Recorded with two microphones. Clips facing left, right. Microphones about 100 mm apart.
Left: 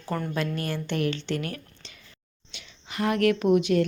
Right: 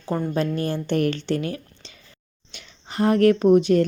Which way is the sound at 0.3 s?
30° right (ahead or behind).